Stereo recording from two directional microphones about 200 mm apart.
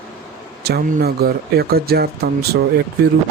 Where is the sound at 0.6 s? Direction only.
50° right (ahead or behind).